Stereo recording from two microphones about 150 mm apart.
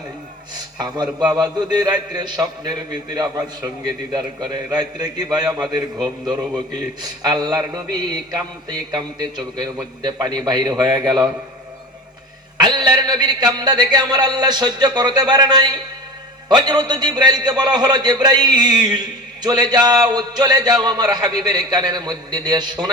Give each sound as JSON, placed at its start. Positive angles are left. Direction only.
{"t": 0.8, "sound": "a man's voice", "side_deg": -25}
{"t": 12.5, "sound": "a man's voice", "side_deg": -30}